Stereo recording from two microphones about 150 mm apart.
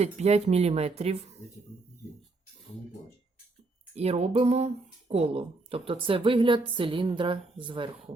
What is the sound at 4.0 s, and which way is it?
Speech, 45° right (ahead or behind).